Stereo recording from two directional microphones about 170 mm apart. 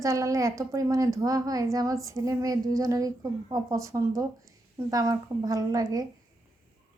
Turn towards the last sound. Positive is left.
turn(degrees=-20)  # may be behind; listen again after turning